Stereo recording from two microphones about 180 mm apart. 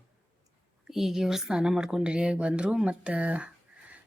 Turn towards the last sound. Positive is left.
turn(degrees=-10)  # may be behind; listen again after turning